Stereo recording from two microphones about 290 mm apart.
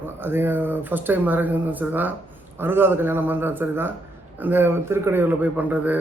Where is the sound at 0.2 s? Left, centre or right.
Centre.